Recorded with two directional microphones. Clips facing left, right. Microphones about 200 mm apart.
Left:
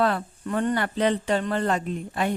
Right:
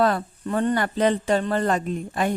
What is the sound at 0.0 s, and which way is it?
A woman's voice, 35° right (ahead or behind).